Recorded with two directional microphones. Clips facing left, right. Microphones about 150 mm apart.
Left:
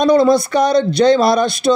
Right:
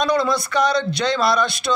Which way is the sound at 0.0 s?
45° left (ahead or behind).